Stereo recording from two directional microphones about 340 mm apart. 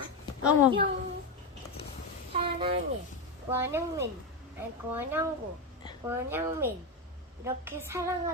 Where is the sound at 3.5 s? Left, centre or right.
Centre.